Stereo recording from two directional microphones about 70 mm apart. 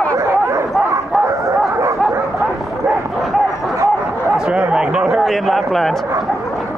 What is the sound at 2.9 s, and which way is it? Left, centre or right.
Bow-wow, centre.